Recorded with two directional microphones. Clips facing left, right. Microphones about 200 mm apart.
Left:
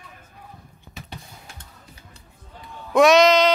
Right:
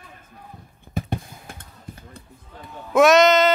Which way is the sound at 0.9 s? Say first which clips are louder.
Right 12 dB; 50° right (ahead or behind).